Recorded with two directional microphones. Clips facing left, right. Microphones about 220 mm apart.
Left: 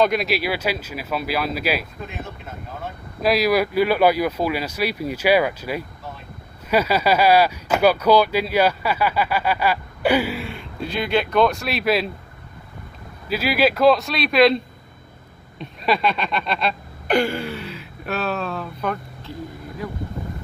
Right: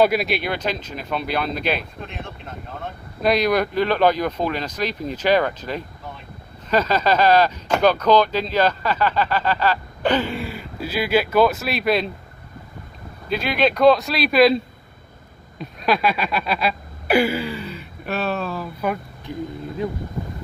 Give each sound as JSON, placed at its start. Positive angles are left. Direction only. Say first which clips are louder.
{"t": 0.0, "sound": "speech", "louder": "right 1 dB", "side_deg": -5}
{"t": 13.3, "sound": "speech", "louder": "left 1 dB", "side_deg": 5}
{"t": 15.6, "sound": "a sound", "louder": "right 1 dB", "side_deg": 0}
{"t": 19.8, "sound": "speech", "louder": "right 5 dB", "side_deg": -25}